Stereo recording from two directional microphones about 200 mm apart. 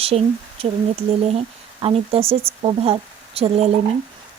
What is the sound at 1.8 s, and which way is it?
Speech, 30° right (ahead or behind).